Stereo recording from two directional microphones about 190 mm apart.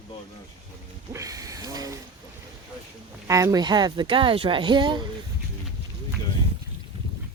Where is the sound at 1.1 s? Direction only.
15° right (ahead or behind).